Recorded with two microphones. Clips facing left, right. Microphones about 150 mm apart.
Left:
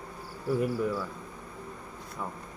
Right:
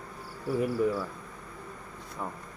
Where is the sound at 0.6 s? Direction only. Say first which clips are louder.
Right 4 dB; centre (ahead or behind).